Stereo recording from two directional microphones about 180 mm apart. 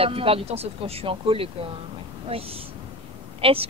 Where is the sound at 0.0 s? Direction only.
30° right (ahead or behind).